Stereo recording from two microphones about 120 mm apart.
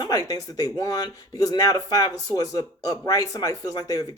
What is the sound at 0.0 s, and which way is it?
Speech, 35° left (ahead or behind).